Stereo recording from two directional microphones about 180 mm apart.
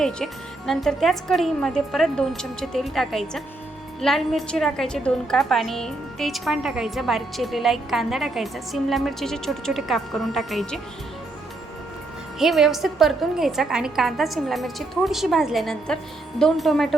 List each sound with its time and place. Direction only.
0.7 s a woman's voice: centre (ahead or behind)
12.4 s a woman's voice: centre (ahead or behind)